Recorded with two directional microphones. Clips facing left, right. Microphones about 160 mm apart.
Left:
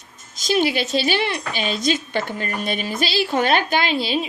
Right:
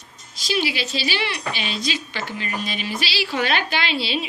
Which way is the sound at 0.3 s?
45° left (ahead or behind).